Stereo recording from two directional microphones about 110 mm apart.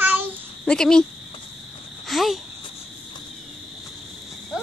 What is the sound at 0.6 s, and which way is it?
Speech, 5° left (ahead or behind).